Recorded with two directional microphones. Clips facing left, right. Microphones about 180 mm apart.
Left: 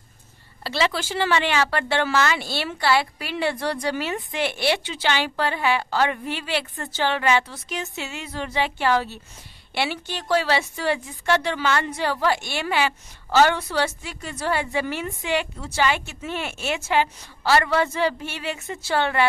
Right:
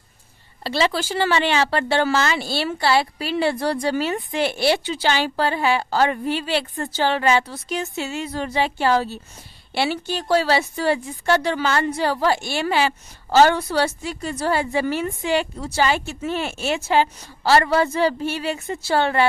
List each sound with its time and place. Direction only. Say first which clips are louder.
0.7 s a woman's voice: right 3 dB; 35° right (ahead or behind)